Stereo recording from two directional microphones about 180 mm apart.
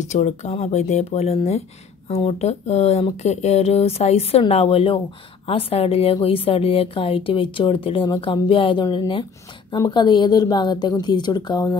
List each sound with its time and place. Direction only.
0.0 s a woman's voice: 40° left (ahead or behind); by 11.7 s 25° left (ahead or behind)